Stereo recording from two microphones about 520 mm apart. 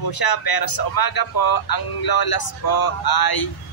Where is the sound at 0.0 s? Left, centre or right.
Left.